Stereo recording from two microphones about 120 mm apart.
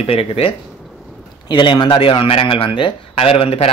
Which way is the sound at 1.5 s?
40° left (ahead or behind).